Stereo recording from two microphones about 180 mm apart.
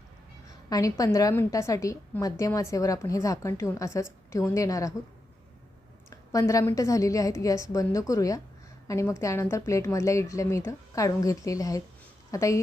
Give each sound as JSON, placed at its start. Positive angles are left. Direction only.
{"t": 0.4, "sound": "a woman's voice", "side_deg": 20}
{"t": 6.1, "sound": "a woman's voice", "side_deg": 15}